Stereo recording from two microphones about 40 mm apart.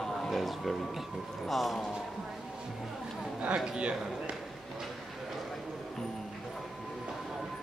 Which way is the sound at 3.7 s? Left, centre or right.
Right.